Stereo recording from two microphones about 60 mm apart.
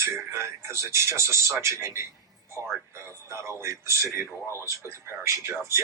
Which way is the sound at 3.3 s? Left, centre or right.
Right.